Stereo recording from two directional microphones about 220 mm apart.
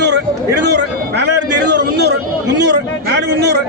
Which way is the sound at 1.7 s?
50° right (ahead or behind).